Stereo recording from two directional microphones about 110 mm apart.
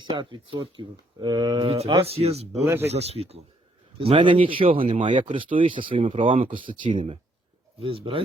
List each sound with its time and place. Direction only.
0.0 s speech: 45° right (ahead or behind)
2.0 s speech: 65° right (ahead or behind)
3.9 s speech: 55° right (ahead or behind)